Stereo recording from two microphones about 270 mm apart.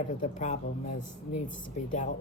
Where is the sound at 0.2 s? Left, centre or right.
Left.